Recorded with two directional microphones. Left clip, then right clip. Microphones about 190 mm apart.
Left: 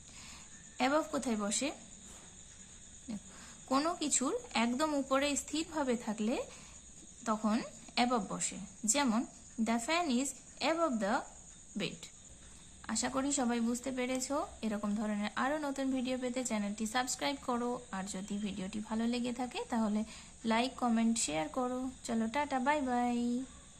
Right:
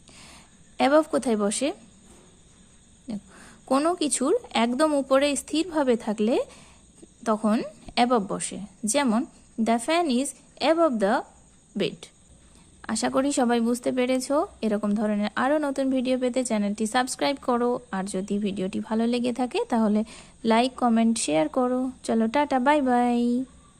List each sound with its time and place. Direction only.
0.8 s speech: 45° right (ahead or behind)
3.1 s speech: 45° right (ahead or behind)